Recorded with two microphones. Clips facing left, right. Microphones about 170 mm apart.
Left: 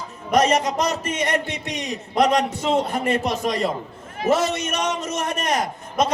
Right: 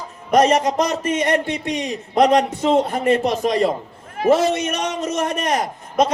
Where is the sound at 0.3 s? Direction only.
50° right (ahead or behind).